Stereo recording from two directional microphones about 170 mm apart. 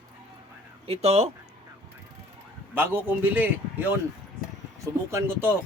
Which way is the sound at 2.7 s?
10° right (ahead or behind).